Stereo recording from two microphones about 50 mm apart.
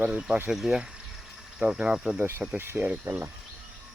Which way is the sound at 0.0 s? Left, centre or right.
Right.